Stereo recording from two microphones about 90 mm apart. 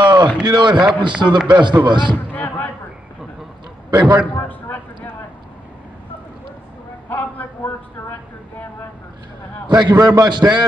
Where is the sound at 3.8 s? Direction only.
50° right (ahead or behind).